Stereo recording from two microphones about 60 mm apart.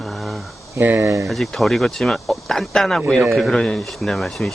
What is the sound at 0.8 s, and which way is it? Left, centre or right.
Speech, right.